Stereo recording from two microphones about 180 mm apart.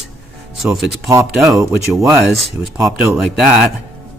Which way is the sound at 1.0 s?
15° right (ahead or behind).